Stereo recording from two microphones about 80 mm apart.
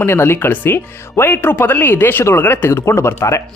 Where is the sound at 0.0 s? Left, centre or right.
Left.